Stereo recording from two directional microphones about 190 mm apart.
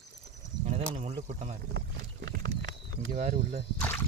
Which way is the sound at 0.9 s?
35° right (ahead or behind).